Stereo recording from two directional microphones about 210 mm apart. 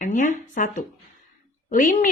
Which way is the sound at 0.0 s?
40° left (ahead or behind).